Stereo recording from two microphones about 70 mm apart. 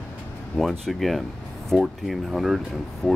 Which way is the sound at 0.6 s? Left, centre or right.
Centre.